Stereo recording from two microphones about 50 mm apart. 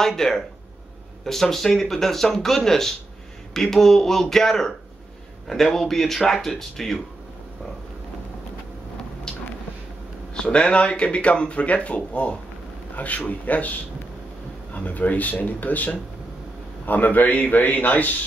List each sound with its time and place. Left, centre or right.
0.0 s speech: centre
10.3 s a man's voice: centre; by 18.1 s left